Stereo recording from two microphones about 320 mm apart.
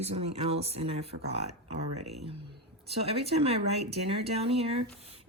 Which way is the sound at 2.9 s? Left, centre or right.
Centre.